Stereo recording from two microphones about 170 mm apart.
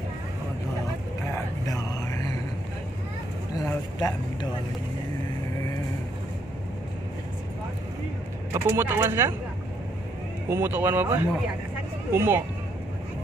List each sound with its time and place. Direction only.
1.3 s a sound: 20° left (ahead or behind)
3.6 s vehicle: 20° left (ahead or behind)
8.5 s speech: 15° right (ahead or behind)
10.5 s speech: 15° right (ahead or behind)